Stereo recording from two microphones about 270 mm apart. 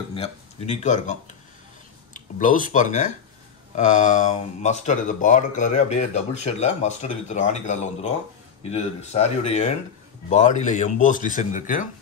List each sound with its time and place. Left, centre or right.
0.1 s speech: left
2.1 s speech: left